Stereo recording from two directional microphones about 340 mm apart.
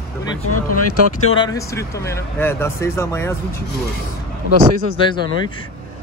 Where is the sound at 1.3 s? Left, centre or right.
Centre.